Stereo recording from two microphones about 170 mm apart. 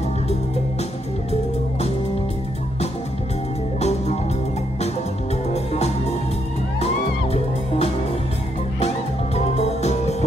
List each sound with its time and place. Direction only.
3.8 s music: 40° left (ahead or behind)
5.5 s music: 40° left (ahead or behind)
8.7 s music: 35° left (ahead or behind)